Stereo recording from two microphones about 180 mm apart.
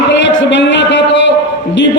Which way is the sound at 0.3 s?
80° left.